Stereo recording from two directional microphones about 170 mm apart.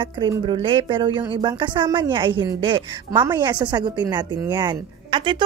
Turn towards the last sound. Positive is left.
turn(degrees=-30)  # may be behind; listen again after turning